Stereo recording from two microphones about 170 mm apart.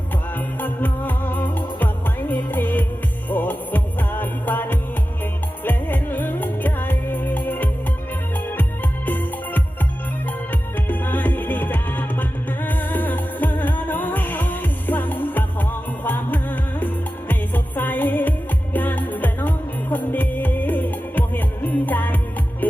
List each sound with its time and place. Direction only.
0.3 s music: 10° left (ahead or behind)
9.0 s music: 10° left (ahead or behind)